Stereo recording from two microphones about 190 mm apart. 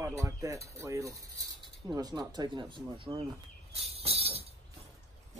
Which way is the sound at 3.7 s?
30° right (ahead or behind).